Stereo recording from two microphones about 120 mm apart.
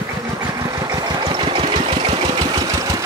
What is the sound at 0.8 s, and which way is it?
Engine, 35° right (ahead or behind).